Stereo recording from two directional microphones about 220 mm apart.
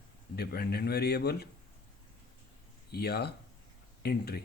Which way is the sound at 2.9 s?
45° left (ahead or behind).